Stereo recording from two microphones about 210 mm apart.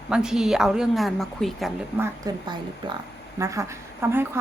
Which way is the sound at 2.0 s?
20° right (ahead or behind).